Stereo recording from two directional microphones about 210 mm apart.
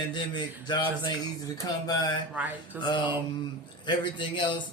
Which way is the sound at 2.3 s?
5° right (ahead or behind).